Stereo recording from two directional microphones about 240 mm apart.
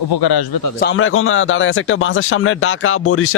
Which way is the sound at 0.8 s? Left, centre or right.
Left.